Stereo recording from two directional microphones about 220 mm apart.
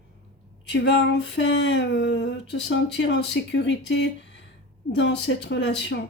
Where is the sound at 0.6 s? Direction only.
55° left (ahead or behind).